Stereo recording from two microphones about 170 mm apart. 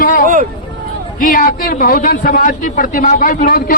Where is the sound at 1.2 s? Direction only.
55° left (ahead or behind).